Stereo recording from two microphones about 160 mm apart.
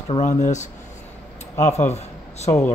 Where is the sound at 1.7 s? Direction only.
45° left (ahead or behind).